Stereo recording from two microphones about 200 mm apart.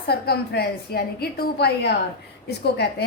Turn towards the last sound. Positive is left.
turn(degrees=55)  # may be behind; listen again after turning